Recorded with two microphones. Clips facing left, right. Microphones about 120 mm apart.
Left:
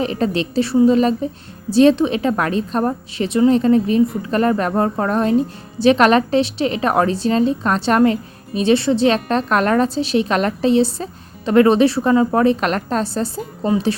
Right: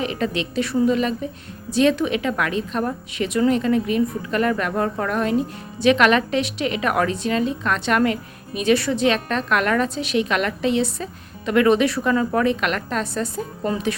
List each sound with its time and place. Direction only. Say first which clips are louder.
0.0 s a woman's voice: left 4 dB; 35° left (ahead or behind)